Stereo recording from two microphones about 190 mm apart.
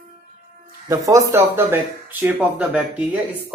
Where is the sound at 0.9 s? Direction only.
15° right (ahead or behind).